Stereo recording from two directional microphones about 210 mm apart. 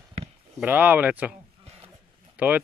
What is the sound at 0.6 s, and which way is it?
Speech, 10° right (ahead or behind).